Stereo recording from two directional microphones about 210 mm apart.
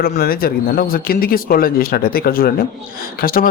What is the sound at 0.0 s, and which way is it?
A man's voice, 45° left (ahead or behind).